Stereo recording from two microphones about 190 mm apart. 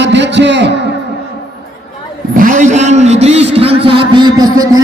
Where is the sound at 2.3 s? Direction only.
45° right (ahead or behind); by 4.8 s 20° right (ahead or behind).